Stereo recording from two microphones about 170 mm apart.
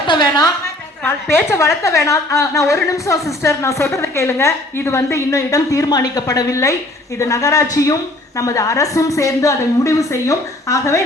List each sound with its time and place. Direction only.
0.1 s a woman's voice: 25° left (ahead or behind)